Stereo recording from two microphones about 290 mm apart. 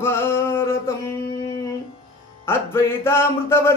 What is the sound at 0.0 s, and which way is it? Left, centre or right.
Music, centre.